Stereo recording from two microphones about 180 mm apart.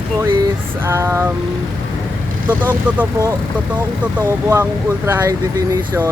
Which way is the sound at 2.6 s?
10° right (ahead or behind).